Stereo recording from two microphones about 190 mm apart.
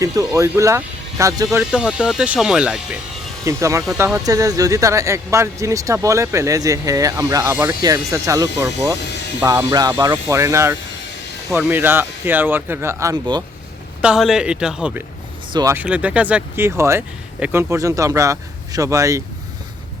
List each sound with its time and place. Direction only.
0.0 s speech: 20° right (ahead or behind)
1.5 s speech: 5° right (ahead or behind)
3.4 s speech: 15° right (ahead or behind)
14.0 s speech: 5° right (ahead or behind)